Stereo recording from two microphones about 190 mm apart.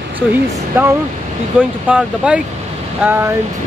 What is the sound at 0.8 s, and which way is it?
Speech, 10° right (ahead or behind).